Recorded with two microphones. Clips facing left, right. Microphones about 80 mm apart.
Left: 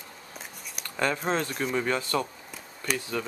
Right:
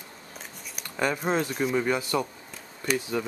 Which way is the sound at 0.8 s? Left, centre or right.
Centre.